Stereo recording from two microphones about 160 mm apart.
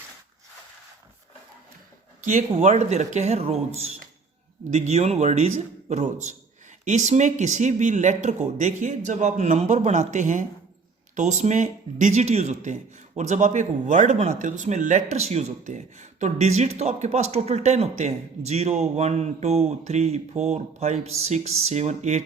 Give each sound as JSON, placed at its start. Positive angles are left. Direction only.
{"t": 2.2, "sound": "speech", "side_deg": -50}